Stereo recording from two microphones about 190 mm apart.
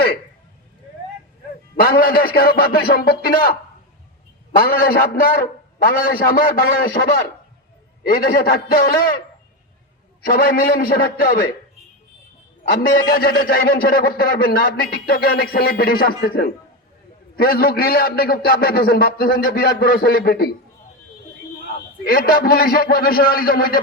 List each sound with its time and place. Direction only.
1.7 s a man's voice: 55° left (ahead or behind)
8.0 s a man's voice: 50° left (ahead or behind)
10.2 s a man's voice: 50° left (ahead or behind)
12.6 s a man's voice: 50° left (ahead or behind)
21.8 s a man's voice: 55° left (ahead or behind)